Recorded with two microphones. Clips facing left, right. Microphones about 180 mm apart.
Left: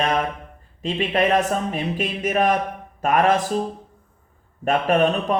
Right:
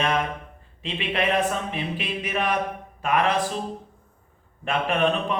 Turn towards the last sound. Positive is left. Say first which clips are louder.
# left 4 dB
turn(degrees=45)  # may be behind; listen again after turning